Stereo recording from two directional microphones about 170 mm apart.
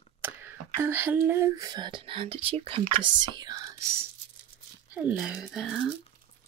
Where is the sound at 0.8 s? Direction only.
10° right (ahead or behind).